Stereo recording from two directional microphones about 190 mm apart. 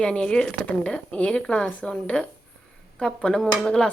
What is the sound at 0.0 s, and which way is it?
Speech, 5° left (ahead or behind).